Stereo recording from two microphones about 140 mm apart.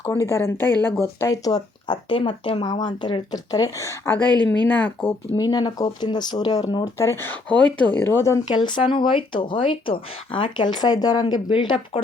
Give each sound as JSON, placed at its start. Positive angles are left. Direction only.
{"t": 0.0, "sound": "speech", "side_deg": 20}
{"t": 4.3, "sound": "speech", "side_deg": -30}
{"t": 4.6, "sound": "speech", "side_deg": 10}
{"t": 5.3, "sound": "speech", "side_deg": 30}
{"t": 8.5, "sound": "speech", "side_deg": 35}